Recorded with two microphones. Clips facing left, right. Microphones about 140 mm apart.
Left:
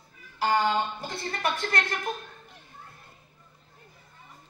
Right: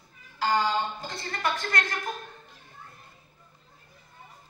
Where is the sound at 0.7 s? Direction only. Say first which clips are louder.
Left 1 dB; 25° left (ahead or behind).